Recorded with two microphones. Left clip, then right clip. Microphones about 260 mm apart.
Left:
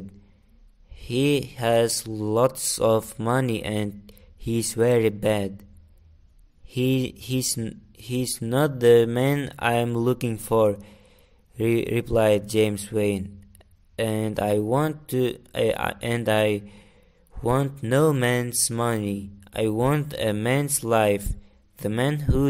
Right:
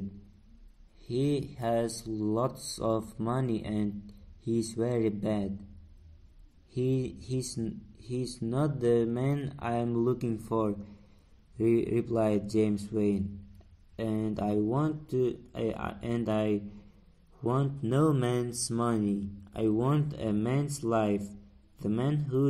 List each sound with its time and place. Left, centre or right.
1.1 s speech: left
6.7 s speech: left
10.5 s a man's voice: left
11.5 s a man's voice: left